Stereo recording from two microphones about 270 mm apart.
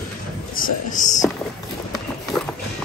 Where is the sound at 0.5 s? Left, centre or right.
Left.